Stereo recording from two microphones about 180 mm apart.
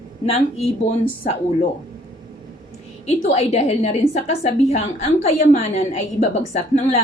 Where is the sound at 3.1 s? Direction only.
35° left (ahead or behind).